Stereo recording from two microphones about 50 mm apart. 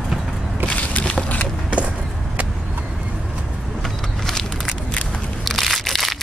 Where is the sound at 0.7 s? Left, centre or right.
Left.